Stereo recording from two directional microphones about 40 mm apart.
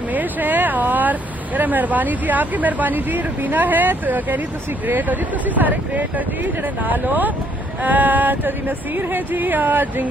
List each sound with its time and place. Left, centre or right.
0.1 s speech: right